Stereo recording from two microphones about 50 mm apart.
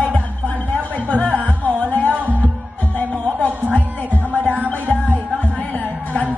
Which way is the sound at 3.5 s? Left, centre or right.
Right.